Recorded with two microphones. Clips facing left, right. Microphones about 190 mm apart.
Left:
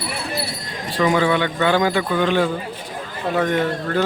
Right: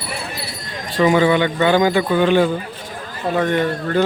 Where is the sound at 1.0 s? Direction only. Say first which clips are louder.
Right 3 dB; 5° right (ahead or behind).